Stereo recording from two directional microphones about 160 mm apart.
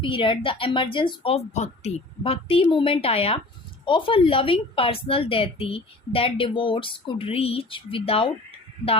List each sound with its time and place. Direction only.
0.0 s a woman's voice: 35° left (ahead or behind)